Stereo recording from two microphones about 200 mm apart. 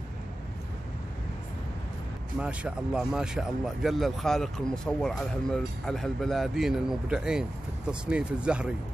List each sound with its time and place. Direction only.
2.4 s speech: 5° right (ahead or behind)